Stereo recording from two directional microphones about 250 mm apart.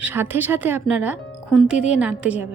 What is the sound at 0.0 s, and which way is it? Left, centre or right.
A woman's voice, centre.